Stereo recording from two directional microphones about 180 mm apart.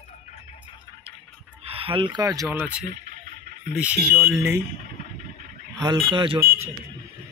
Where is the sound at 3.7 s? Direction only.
5° right (ahead or behind).